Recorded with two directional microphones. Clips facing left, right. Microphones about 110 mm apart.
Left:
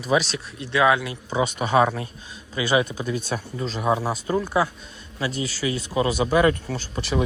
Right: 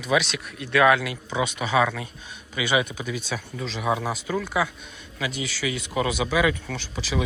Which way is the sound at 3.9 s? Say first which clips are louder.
Left 3 dB; 30° left (ahead or behind).